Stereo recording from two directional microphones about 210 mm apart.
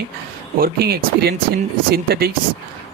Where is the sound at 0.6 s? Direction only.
50° right (ahead or behind).